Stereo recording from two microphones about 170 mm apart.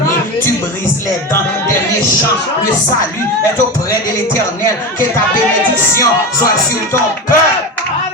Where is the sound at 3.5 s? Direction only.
20° left (ahead or behind).